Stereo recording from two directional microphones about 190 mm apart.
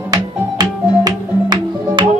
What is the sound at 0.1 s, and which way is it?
Music, 20° right (ahead or behind).